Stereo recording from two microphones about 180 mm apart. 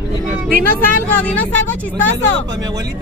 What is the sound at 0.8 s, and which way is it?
A woman's voice, 10° left (ahead or behind).